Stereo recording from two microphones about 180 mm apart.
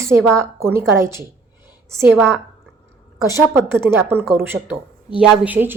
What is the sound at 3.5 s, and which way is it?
A woman's voice, 15° right (ahead or behind).